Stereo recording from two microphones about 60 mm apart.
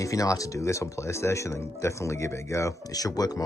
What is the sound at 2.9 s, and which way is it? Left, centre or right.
Speech, left.